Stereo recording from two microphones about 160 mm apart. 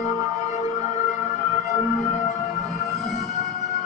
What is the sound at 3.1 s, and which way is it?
Siren, 40° left (ahead or behind).